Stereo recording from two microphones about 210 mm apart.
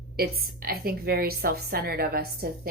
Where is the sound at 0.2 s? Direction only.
45° right (ahead or behind).